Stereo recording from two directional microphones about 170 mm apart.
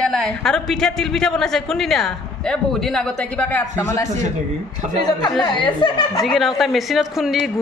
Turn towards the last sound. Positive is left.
turn(degrees=0)  # may be behind; listen again after turning